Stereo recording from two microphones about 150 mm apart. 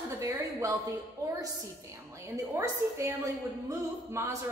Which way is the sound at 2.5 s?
20° right (ahead or behind).